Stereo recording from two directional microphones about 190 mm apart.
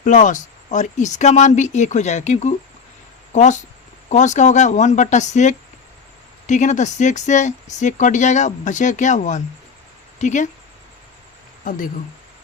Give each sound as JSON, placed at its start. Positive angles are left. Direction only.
{"t": 0.0, "sound": "speech", "side_deg": 40}